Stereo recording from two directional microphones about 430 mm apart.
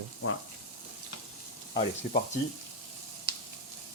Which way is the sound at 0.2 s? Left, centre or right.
Left.